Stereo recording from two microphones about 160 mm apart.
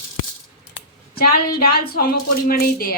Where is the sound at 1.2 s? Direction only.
70° left (ahead or behind).